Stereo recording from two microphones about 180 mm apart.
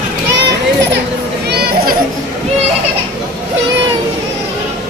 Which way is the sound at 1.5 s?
60° right (ahead or behind).